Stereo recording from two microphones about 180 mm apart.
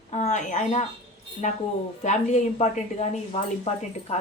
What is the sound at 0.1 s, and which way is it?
Speech, 40° left (ahead or behind).